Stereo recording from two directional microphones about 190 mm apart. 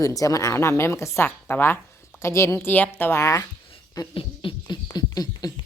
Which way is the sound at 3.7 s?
30° left (ahead or behind).